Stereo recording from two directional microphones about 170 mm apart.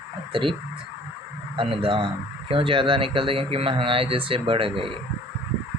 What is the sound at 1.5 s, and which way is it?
Speech, 30° right (ahead or behind).